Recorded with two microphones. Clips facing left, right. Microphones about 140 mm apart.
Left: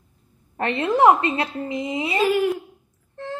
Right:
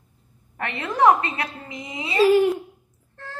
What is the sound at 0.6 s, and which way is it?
A woman's voice, 30° left (ahead or behind).